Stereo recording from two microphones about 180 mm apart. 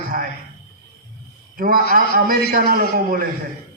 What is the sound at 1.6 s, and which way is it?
A man's voice, 55° right (ahead or behind).